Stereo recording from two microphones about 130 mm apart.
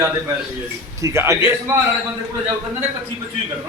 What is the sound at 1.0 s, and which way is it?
Speech, 20° right (ahead or behind).